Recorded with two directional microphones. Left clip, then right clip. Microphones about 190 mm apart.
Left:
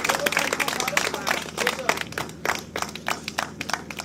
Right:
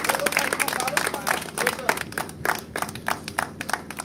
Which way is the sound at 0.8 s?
55° right (ahead or behind).